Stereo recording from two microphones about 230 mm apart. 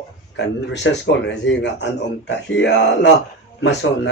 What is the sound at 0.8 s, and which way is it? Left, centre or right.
Speech, left.